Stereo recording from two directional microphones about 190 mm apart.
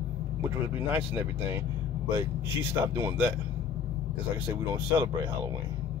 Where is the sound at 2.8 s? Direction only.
10° right (ahead or behind).